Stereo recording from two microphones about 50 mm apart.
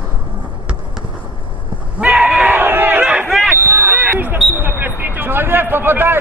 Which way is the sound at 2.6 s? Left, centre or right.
Right.